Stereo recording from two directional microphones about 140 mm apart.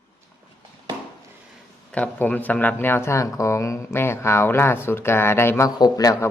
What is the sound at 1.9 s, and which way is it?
A man's voice, 10° left (ahead or behind).